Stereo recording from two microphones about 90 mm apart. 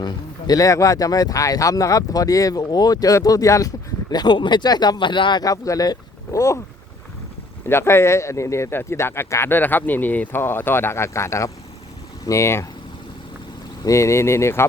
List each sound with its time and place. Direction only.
0.0 s speech: 45° left (ahead or behind)
4.1 s speech: 55° left (ahead or behind)
5.4 s speech: 40° left (ahead or behind)
7.7 s speech: 30° left (ahead or behind)
13.8 s speech: 35° left (ahead or behind)